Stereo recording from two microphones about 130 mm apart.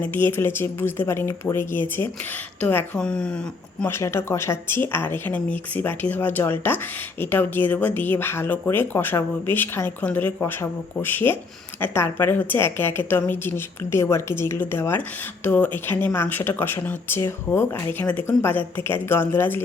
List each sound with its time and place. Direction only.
0.0 s speech: 15° left (ahead or behind)
3.8 s speech: 20° left (ahead or behind)